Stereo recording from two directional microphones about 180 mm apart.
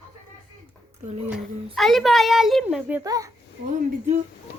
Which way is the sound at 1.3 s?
Centre (ahead or behind).